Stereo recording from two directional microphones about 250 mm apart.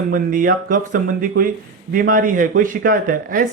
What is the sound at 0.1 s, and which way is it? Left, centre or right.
Speech, right.